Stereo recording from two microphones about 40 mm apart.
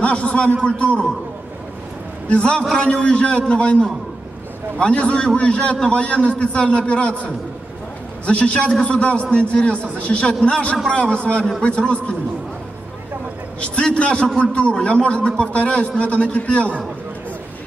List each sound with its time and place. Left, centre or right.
0.0 s a man's voice: left
2.2 s a man's voice: left
13.6 s a man's voice: left